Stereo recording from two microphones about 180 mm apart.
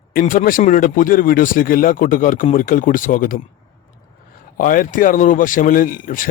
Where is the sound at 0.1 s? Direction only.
50° left (ahead or behind).